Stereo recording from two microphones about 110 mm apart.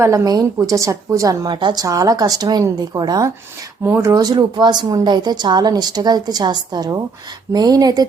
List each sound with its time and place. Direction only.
0.0 s a woman's voice: 25° right (ahead or behind)